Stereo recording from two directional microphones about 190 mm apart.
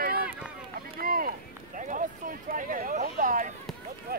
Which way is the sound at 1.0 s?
50° right (ahead or behind).